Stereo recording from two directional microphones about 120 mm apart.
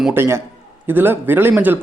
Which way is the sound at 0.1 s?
20° right (ahead or behind).